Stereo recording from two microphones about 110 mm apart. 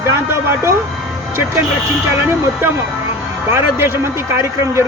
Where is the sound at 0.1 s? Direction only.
25° right (ahead or behind).